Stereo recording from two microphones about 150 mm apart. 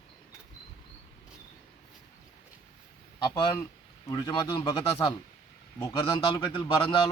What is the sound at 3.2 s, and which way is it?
A man's voice, 30° left (ahead or behind).